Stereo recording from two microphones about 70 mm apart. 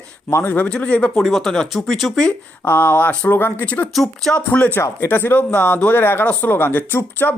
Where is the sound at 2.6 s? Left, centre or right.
Left.